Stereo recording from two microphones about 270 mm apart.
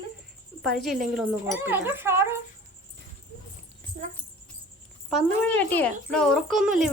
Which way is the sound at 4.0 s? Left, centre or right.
Right.